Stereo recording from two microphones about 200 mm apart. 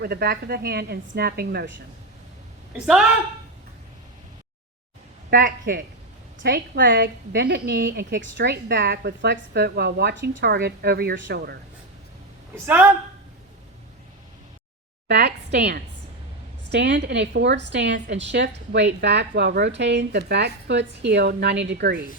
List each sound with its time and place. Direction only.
0.0 s a woman's voice: 50° right (ahead or behind)
2.7 s a woman's voice: 5° right (ahead or behind)
5.3 s a woman's voice: 45° right (ahead or behind)
6.4 s a woman's voice: 60° right (ahead or behind)
12.6 s a woman's voice: 10° right (ahead or behind)
15.0 s a woman's voice: 55° right (ahead or behind)